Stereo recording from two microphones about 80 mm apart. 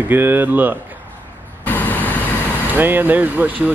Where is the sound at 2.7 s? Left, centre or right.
Right.